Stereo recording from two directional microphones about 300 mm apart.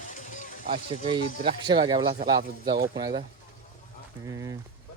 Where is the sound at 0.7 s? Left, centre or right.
Centre.